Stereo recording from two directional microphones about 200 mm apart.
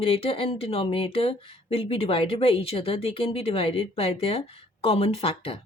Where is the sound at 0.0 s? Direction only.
30° left (ahead or behind).